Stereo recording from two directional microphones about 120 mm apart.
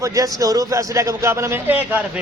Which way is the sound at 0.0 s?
30° right (ahead or behind).